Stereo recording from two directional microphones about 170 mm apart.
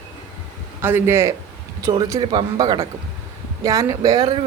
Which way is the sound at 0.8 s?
10° right (ahead or behind).